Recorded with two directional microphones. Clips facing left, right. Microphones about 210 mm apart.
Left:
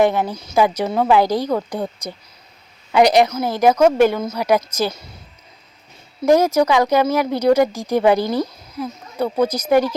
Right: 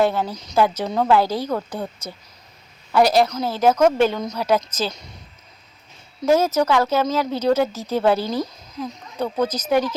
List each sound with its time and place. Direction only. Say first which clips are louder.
0.0 s speech: left 3 dB; 15° left (ahead or behind)
6.2 s speech: left 3 dB; 15° left (ahead or behind)